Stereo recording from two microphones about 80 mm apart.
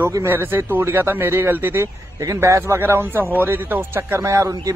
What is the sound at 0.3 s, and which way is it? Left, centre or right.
A man's voice, right.